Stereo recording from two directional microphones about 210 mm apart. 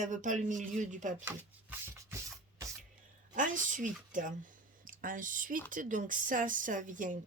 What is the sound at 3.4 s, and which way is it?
A woman's voice, 40° right (ahead or behind).